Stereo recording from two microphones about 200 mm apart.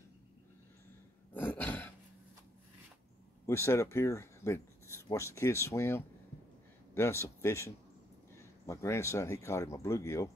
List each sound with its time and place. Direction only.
1.3 s throat clearing: 10° left (ahead or behind)
3.4 s speech: 15° left (ahead or behind)